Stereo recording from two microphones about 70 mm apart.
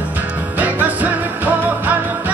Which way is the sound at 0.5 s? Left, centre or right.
Right.